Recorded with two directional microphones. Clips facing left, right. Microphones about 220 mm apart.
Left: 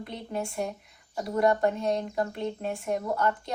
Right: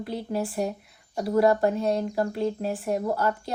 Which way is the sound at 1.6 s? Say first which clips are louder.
Right 2 dB; centre (ahead or behind).